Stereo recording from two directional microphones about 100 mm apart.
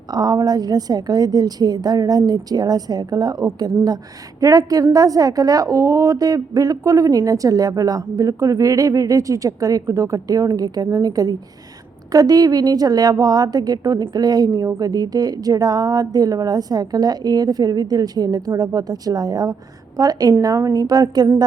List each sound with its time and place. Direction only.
0.1 s a woman's voice: 40° right (ahead or behind)